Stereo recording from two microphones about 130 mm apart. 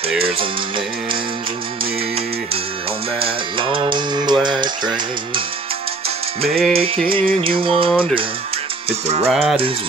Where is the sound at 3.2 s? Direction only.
40° right (ahead or behind).